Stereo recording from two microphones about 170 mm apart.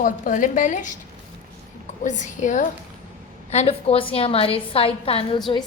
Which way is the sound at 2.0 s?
45° left (ahead or behind).